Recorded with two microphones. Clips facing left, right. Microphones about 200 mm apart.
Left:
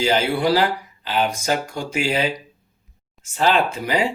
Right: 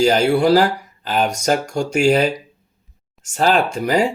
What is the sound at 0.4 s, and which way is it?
Speech, 45° right (ahead or behind).